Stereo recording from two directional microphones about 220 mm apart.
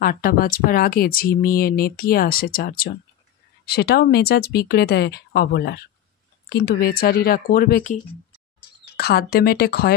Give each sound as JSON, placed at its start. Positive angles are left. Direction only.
{"t": 0.0, "sound": "speech", "side_deg": 40}